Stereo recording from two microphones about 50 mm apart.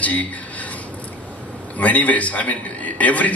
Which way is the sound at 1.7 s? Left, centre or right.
Left.